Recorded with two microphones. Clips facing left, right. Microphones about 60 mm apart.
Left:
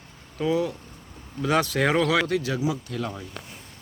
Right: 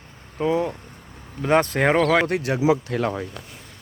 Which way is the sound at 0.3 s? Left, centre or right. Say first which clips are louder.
Right 2 dB; right.